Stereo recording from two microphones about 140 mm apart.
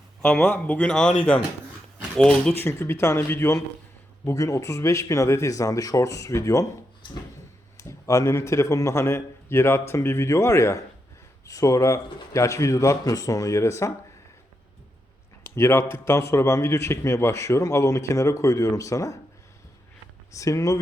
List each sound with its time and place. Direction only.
0.2 s speech: 10° left (ahead or behind)
2.1 s speech: 5° left (ahead or behind)
2.6 s a man's voice: 20° left (ahead or behind)
7.8 s a man's voice: 20° left (ahead or behind)
15.5 s a man's voice: 20° left (ahead or behind)
20.3 s a man's voice: 25° left (ahead or behind)